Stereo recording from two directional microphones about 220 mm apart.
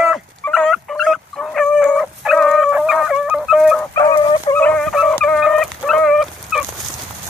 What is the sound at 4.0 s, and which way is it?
Fowl, 20° left (ahead or behind).